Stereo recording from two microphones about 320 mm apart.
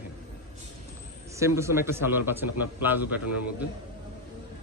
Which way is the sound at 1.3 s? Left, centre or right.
Centre.